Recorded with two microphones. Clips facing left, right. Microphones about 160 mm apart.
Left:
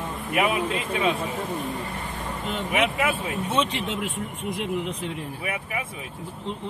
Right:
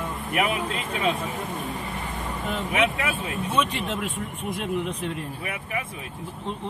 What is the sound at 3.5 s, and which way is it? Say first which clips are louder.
Speech: even; 25° left (ahead or behind).